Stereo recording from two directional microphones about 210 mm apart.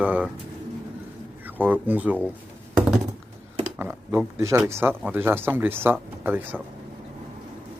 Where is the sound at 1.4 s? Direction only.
10° right (ahead or behind).